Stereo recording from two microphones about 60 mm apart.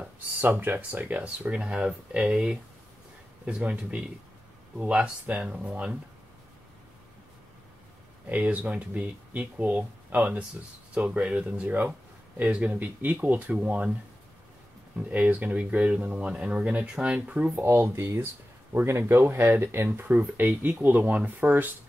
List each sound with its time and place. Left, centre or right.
0.4 s speech: right; by 5.9 s centre
8.3 s speech: right
15.0 s speech: right
17.6 s speech: right